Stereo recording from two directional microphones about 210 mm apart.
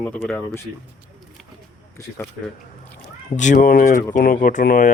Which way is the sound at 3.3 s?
35° left (ahead or behind).